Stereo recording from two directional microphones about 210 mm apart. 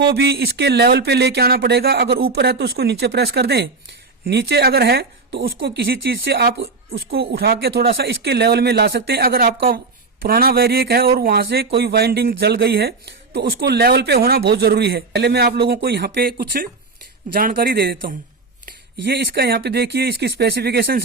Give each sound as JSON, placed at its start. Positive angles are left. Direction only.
{"t": 0.0, "sound": "speech", "side_deg": -50}